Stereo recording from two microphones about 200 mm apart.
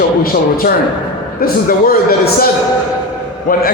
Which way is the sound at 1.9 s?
50° left (ahead or behind).